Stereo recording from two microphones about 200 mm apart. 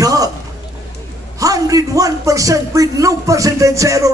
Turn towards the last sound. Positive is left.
turn(degrees=-15)  # may be behind; listen again after turning